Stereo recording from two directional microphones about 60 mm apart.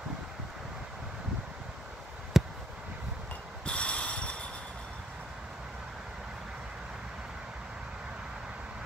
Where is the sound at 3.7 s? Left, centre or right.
Centre.